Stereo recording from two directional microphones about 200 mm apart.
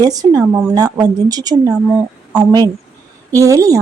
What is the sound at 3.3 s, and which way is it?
Speech, 15° right (ahead or behind).